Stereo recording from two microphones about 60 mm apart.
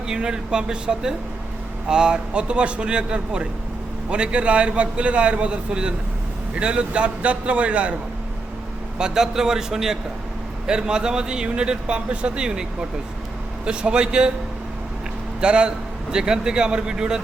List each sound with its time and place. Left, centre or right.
0.1 s a man's voice: centre
9.0 s speech: centre
13.7 s speech: centre
15.4 s speech: centre